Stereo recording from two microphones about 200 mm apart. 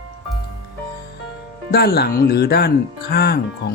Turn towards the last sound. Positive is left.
turn(degrees=50)  # may be behind; listen again after turning